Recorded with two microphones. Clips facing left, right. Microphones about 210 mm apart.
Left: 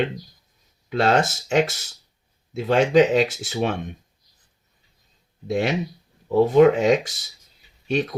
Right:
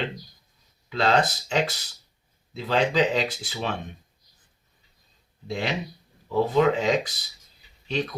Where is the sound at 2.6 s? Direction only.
50° left (ahead or behind).